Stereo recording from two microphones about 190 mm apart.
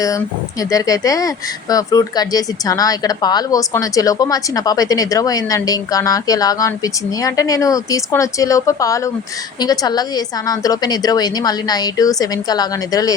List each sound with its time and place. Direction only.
0.6 s a woman's voice: 20° left (ahead or behind)